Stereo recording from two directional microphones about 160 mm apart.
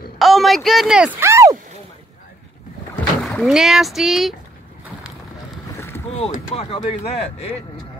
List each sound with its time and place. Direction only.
0.2 s a sound: centre (ahead or behind)
1.2 s speech: 20° right (ahead or behind)
3.3 s speech: centre (ahead or behind)
5.8 s boat: 15° left (ahead or behind)
6.1 s speech: 40° left (ahead or behind)